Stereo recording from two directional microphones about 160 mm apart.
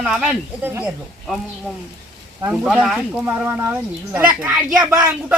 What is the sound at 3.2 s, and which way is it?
A man's voice, 15° right (ahead or behind).